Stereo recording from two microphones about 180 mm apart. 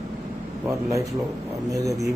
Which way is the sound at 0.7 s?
15° right (ahead or behind).